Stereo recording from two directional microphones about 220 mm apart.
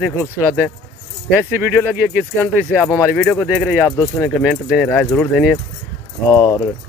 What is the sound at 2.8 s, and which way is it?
Speech, 10° left (ahead or behind).